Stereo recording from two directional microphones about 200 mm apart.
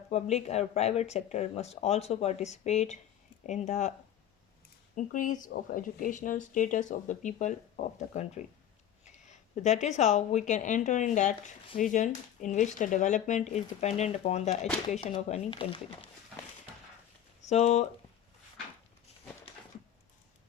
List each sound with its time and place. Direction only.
0.1 s speech: 35° left (ahead or behind)
4.9 s speech: 40° left (ahead or behind)
17.5 s speech: 30° left (ahead or behind)